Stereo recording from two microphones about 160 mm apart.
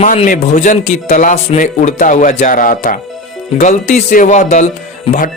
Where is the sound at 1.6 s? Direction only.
55° left (ahead or behind).